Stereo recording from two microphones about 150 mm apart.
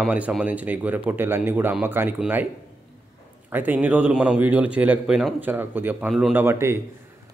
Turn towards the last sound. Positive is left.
turn(degrees=-15)  # may be behind; listen again after turning